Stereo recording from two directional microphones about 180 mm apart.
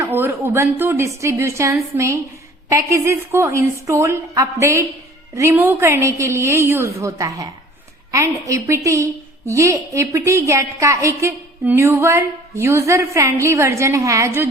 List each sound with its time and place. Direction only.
0.0 s a woman's voice: 10° right (ahead or behind)